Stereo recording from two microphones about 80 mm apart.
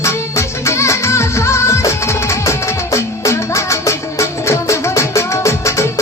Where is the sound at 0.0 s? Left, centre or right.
Left.